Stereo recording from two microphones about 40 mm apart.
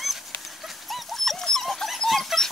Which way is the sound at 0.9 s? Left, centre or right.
Centre.